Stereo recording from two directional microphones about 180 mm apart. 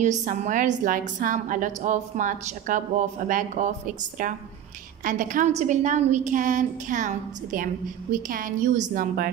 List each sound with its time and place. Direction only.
0.0 s a woman's voice: 45° right (ahead or behind)